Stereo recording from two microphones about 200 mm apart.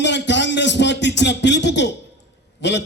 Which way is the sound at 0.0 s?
60° left (ahead or behind).